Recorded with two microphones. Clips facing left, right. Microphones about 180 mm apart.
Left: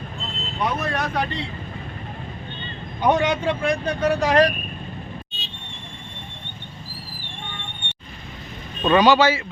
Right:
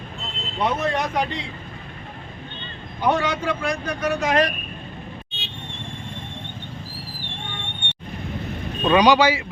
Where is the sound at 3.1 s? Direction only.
20° left (ahead or behind).